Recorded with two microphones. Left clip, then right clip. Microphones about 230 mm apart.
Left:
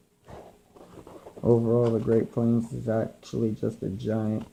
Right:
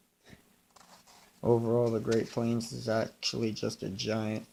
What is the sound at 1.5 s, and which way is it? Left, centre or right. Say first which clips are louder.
Speech: left 4 dB; right.